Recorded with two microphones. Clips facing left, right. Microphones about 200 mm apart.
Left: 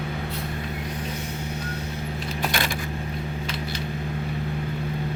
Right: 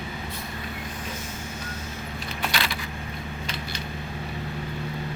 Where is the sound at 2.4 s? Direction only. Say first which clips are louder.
Left 2 dB; 50° left (ahead or behind).